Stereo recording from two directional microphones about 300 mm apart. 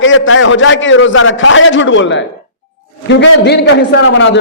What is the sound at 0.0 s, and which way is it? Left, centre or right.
A man's voice, left.